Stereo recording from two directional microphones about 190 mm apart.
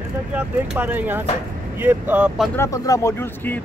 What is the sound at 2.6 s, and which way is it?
Speech, 15° left (ahead or behind).